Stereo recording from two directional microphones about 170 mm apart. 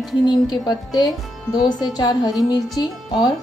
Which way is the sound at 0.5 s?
25° left (ahead or behind).